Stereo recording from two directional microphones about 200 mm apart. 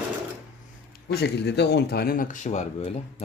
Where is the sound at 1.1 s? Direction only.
55° left (ahead or behind).